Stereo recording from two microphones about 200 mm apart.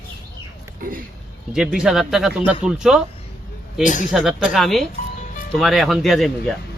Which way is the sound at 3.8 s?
40° left (ahead or behind).